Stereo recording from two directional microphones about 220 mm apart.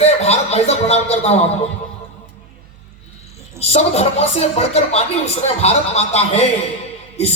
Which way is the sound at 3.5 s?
30° left (ahead or behind).